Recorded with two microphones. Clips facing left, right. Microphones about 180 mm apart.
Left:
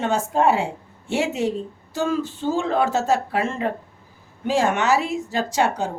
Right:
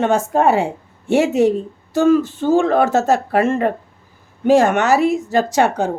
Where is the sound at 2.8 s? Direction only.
45° right (ahead or behind).